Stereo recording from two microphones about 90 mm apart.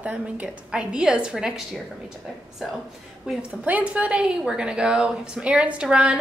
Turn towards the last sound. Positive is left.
turn(degrees=-10)  # may be behind; listen again after turning